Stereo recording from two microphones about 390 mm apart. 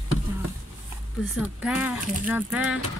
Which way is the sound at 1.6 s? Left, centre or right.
Centre.